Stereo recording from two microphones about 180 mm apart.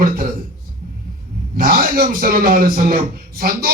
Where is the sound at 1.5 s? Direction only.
55° right (ahead or behind).